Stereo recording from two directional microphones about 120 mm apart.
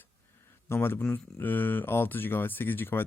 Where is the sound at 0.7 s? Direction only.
20° left (ahead or behind).